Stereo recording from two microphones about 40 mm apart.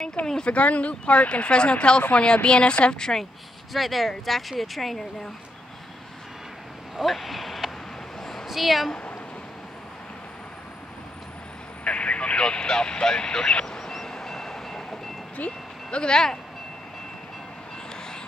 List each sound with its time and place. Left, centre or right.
0.0 s speech: left
3.7 s speech: centre
7.0 s speech: centre
8.2 s a sound: centre
8.5 s a woman's voice: centre
11.8 s vehicle: left; by 15.0 s centre
15.3 s vehicle: left
16.0 s speech: centre